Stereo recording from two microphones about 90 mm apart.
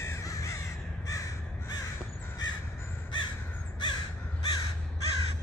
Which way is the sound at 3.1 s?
60° left (ahead or behind).